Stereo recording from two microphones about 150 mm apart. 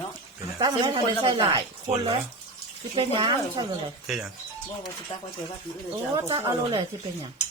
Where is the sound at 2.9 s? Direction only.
35° right (ahead or behind).